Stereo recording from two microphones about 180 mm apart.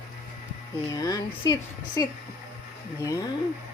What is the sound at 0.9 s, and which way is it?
Speech, 20° left (ahead or behind).